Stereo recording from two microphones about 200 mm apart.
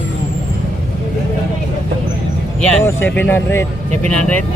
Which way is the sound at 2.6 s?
5° left (ahead or behind).